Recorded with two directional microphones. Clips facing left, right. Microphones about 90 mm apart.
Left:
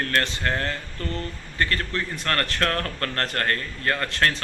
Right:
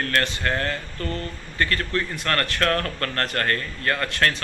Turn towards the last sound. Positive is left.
turn(degrees=30)  # may be behind; listen again after turning